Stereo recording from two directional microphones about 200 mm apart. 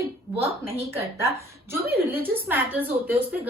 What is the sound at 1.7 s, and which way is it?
A woman's voice, 10° right (ahead or behind).